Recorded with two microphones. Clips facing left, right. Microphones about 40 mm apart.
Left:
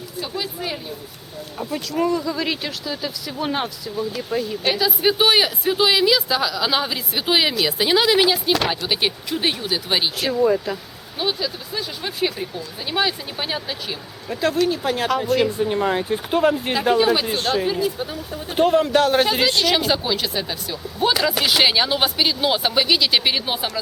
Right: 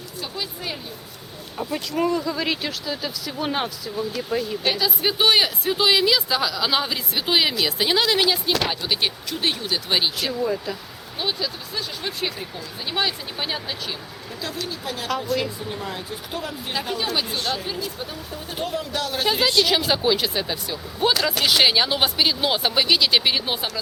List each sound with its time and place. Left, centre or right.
0.2 s speech: centre
1.5 s speech: centre
14.3 s speech: left
17.0 s speech: centre
18.5 s speech: left
19.6 s speech: centre